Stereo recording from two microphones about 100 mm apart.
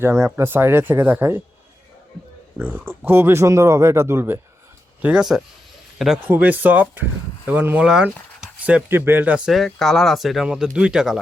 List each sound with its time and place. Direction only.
0.0 s speech: 25° right (ahead or behind)
2.6 s speech: 15° right (ahead or behind)
5.0 s speech: 5° right (ahead or behind)
6.2 s speech: 15° right (ahead or behind)
7.9 s speech: 5° right (ahead or behind)
9.5 s speech: centre (ahead or behind)